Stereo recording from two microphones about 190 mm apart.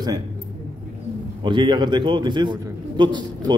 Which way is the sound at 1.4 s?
25° right (ahead or behind).